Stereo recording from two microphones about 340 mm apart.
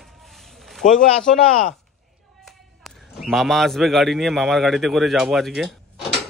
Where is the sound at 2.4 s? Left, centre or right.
Centre.